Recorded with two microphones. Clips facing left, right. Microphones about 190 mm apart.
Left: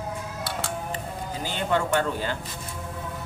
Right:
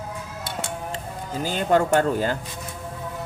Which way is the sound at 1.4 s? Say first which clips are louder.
Right 6 dB; 40° right (ahead or behind).